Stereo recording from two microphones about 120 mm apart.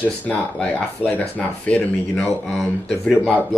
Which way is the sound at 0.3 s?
10° left (ahead or behind).